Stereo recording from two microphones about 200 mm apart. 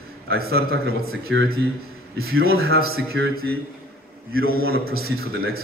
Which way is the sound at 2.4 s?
50° right (ahead or behind).